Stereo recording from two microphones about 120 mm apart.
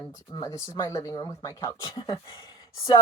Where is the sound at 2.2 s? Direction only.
40° left (ahead or behind).